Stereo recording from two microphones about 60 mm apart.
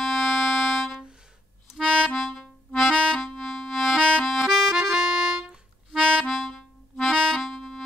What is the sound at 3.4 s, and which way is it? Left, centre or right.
Music, centre.